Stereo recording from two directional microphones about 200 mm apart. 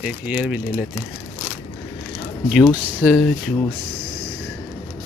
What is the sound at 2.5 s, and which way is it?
Speech, 5° right (ahead or behind).